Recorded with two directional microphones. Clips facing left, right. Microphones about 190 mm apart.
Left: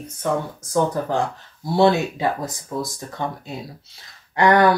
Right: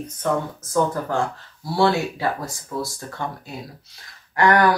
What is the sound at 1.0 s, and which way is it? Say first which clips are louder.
Speech: left 1 dB; 20° left (ahead or behind).